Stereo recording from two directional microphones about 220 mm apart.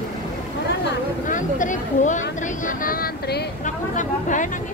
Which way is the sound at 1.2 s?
35° left (ahead or behind).